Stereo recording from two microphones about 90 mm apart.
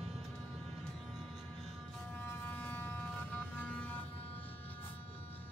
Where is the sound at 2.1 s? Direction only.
20° left (ahead or behind).